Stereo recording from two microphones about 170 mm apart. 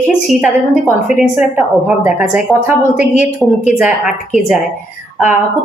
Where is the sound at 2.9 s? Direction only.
45° left (ahead or behind).